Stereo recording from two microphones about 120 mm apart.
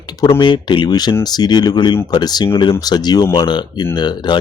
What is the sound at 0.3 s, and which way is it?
Speech, 40° left (ahead or behind).